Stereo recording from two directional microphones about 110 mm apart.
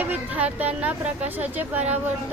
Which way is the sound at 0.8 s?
15° right (ahead or behind).